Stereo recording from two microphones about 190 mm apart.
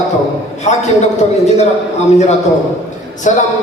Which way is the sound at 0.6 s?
35° left (ahead or behind).